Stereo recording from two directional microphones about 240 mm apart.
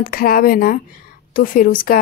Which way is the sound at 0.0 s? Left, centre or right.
Left.